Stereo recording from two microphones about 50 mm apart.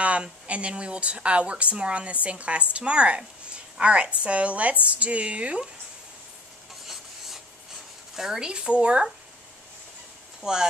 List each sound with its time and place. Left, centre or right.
0.0 s speech: right
6.9 s rub: centre
8.2 s speech: centre
10.4 s speech: centre